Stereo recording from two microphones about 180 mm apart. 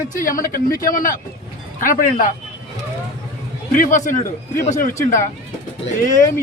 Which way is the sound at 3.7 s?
45° left (ahead or behind).